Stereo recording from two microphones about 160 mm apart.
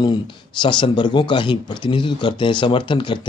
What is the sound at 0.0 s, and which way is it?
Speech, 30° left (ahead or behind).